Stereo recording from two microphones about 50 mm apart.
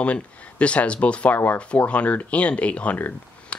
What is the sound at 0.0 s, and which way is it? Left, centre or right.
Speech, left.